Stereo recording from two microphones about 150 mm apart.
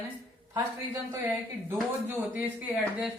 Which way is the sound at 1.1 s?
15° right (ahead or behind).